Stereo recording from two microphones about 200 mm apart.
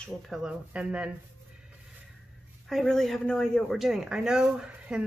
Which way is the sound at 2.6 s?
Centre (ahead or behind).